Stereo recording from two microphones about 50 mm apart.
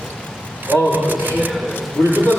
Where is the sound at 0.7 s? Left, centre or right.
Right.